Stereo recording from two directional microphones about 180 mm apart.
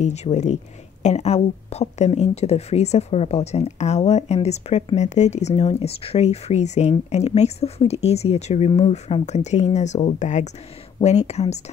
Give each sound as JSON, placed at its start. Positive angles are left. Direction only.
{"t": 0.0, "sound": "speech", "side_deg": 40}